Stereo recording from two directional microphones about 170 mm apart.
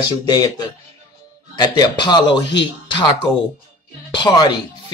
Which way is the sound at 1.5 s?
25° left (ahead or behind).